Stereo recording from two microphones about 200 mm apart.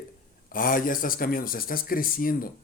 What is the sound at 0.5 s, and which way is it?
Speech, 45° left (ahead or behind).